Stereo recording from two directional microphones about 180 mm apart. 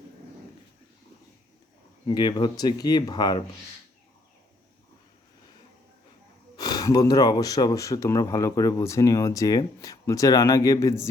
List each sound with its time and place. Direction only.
2.0 s speech: 25° left (ahead or behind)
6.6 s speech: 20° left (ahead or behind)